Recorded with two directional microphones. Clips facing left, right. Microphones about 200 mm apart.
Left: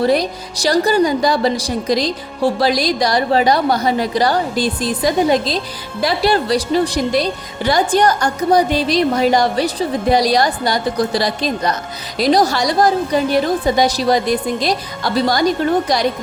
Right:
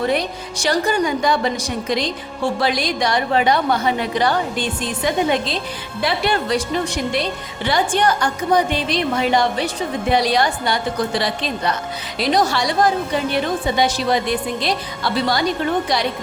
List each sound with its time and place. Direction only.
0.0 s a woman's voice: 35° left (ahead or behind)